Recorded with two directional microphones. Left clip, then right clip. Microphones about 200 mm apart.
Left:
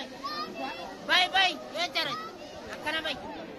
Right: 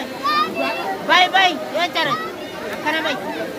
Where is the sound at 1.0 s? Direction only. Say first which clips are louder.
Right 10 dB; 10° right (ahead or behind).